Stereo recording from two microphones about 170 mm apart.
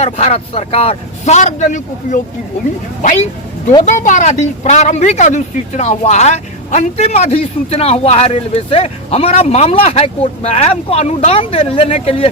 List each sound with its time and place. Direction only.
0.0 s speech: 35° left (ahead or behind)
3.8 s speech: 50° left (ahead or behind)